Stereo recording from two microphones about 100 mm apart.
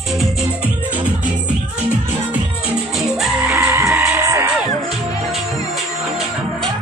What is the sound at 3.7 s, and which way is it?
Music, 25° right (ahead or behind).